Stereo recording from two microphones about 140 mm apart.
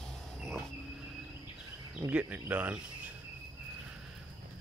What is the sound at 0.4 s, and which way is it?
Vehicle, centre (ahead or behind).